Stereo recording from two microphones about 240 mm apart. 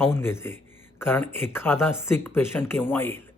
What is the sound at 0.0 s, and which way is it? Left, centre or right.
Speech, centre.